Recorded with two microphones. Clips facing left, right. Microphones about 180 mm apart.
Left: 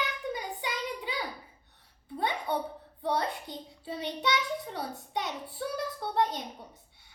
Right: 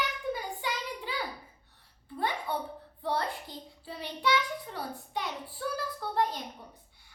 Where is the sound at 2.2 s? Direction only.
20° left (ahead or behind).